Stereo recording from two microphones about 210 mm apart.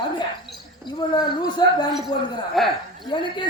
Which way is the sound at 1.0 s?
20° left (ahead or behind).